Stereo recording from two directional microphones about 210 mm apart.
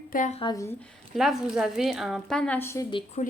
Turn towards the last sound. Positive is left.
turn(degrees=25)  # may be behind; listen again after turning